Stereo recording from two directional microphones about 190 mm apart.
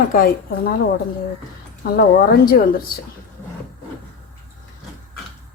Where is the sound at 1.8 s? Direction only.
50° left (ahead or behind).